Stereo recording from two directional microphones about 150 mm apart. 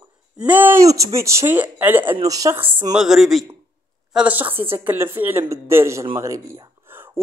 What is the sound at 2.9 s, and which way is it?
Speech, centre (ahead or behind).